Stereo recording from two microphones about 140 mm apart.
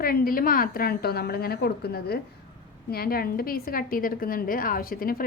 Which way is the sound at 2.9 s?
90° left.